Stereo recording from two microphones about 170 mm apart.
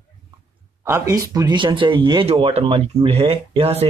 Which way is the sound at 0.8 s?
15° right (ahead or behind).